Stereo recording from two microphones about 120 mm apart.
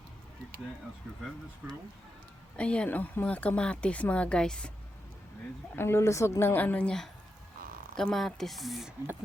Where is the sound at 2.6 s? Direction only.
10° left (ahead or behind).